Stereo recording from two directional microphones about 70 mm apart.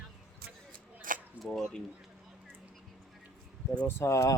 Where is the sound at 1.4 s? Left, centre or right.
Centre.